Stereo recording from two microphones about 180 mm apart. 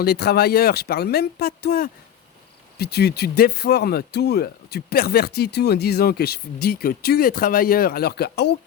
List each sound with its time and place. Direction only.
0.0 s speech: 60° left (ahead or behind)